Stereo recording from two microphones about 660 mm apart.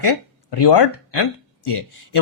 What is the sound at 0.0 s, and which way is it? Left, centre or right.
Speech, left.